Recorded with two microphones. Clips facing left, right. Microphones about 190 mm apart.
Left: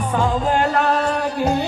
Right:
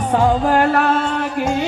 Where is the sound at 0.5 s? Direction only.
65° right (ahead or behind).